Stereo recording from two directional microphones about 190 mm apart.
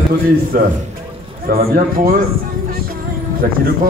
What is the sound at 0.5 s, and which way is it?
A man's voice, 45° right (ahead or behind).